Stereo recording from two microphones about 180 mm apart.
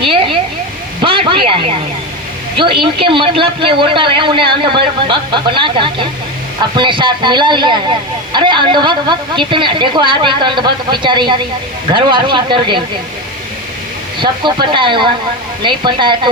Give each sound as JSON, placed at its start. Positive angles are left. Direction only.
{"t": 0.1, "sound": "a sound", "side_deg": -30}
{"t": 1.0, "sound": "a man's voice", "side_deg": -30}
{"t": 2.8, "sound": "a man's voice", "side_deg": -30}
{"t": 14.2, "sound": "a man's voice", "side_deg": -25}